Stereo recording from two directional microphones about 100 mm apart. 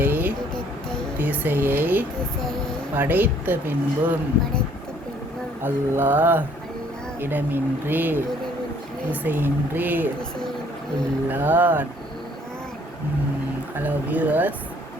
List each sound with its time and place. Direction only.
0.0 s vehicle: 20° right (ahead or behind)
1.2 s speech: 20° right (ahead or behind)
2.4 s speech: 5° left (ahead or behind)
2.9 s speech: 20° right (ahead or behind)
5.6 s speech: 20° right (ahead or behind)
9.2 s speech: 20° right (ahead or behind)
11.3 s speech: 20° right (ahead or behind)
13.7 s speech: 15° right (ahead or behind)